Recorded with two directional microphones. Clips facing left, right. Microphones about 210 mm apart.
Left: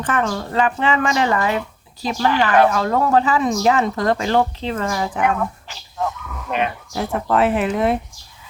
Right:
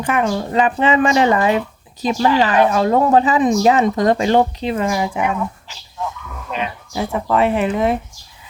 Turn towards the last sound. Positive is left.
turn(degrees=0)  # may be behind; listen again after turning